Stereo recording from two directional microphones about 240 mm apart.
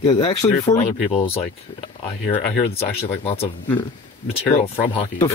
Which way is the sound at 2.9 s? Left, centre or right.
Left.